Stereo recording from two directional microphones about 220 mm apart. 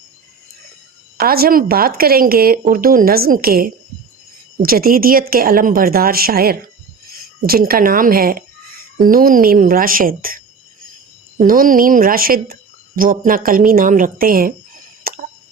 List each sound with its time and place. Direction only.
1.2 s a woman's voice: 45° right (ahead or behind)
11.4 s a woman's voice: 40° right (ahead or behind)
15.1 s a sound: 40° right (ahead or behind)